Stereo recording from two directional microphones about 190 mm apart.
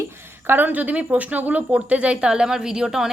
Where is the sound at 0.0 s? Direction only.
10° right (ahead or behind).